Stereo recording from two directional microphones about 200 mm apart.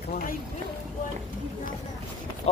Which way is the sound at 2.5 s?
30° left (ahead or behind).